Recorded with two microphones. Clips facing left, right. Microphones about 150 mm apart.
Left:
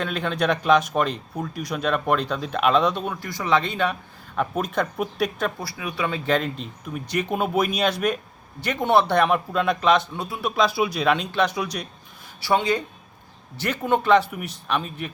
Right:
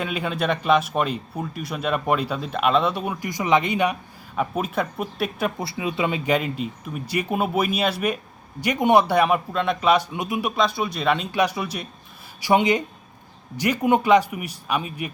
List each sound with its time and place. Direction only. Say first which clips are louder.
0.0 s speech: left 1 dB; 10° right (ahead or behind)
5.5 s speech: right 4 dB; 25° right (ahead or behind)
10.5 s speech: left 6 dB; centre (ahead or behind)
12.4 s speech: right 3 dB; 15° right (ahead or behind)